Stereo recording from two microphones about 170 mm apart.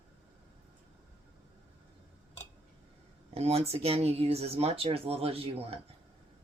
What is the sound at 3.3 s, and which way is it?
Speech, 35° right (ahead or behind).